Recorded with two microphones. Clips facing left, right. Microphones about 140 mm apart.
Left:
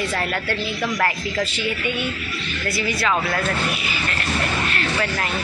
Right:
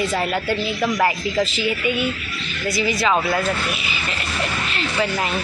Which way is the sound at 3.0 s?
15° right (ahead or behind).